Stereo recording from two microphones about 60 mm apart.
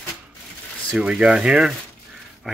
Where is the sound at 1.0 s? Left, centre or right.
Centre.